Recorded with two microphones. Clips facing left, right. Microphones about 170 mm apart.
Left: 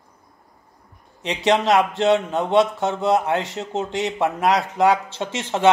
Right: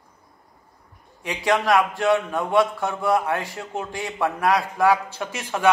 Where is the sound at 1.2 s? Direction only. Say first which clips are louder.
Left 3 dB; 25° left (ahead or behind).